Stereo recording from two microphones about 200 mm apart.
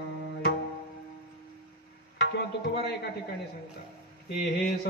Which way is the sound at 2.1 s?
55° left (ahead or behind).